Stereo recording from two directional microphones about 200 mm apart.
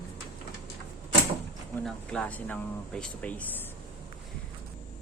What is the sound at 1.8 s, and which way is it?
Speech, 5° left (ahead or behind).